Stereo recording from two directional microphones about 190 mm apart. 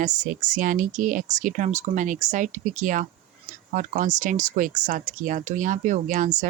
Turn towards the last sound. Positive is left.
turn(degrees=-40)  # may be behind; listen again after turning